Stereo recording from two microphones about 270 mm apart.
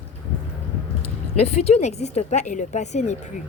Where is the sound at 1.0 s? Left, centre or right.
Left.